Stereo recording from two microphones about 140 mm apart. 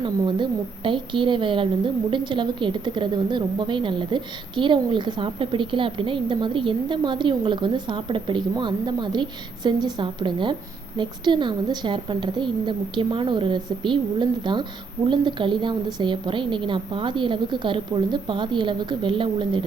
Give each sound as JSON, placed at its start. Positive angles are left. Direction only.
{"t": 0.0, "sound": "a woman's voice", "side_deg": -35}